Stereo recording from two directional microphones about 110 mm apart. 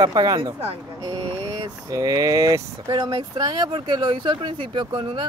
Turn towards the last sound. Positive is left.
turn(degrees=-50)  # may be behind; listen again after turning